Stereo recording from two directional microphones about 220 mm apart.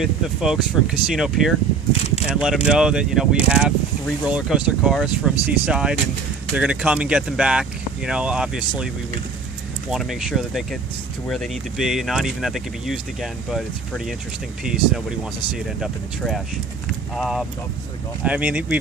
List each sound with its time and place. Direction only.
0.0 s speech: 5° right (ahead or behind)
1.9 s a sound: 30° left (ahead or behind)
2.2 s speech: 5° right (ahead or behind)
9.8 s speech: centre (ahead or behind)